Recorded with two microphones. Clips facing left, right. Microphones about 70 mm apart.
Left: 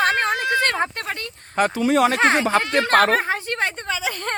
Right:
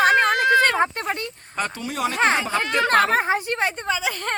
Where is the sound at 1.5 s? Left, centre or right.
Left.